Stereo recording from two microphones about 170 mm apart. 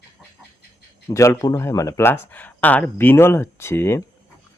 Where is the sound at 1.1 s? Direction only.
20° left (ahead or behind).